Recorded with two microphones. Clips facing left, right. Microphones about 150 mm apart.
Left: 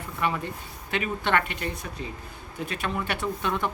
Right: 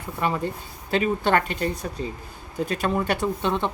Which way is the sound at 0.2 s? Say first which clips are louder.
Right 3 dB; 35° right (ahead or behind).